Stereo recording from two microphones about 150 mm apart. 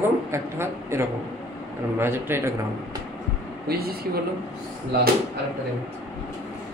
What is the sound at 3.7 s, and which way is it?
Speech, 90° right.